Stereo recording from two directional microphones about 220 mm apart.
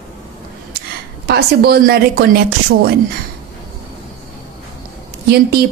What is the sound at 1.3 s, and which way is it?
Speech, 45° right (ahead or behind).